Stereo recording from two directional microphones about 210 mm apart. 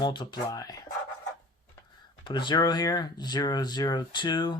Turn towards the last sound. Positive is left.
turn(degrees=20)  # may be behind; listen again after turning